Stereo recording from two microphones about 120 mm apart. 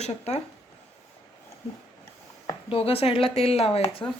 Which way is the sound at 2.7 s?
55° left (ahead or behind).